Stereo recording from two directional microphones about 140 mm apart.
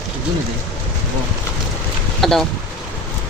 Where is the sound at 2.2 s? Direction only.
5° left (ahead or behind).